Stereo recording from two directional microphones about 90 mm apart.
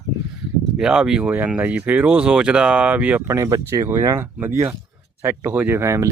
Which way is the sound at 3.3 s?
35° right (ahead or behind).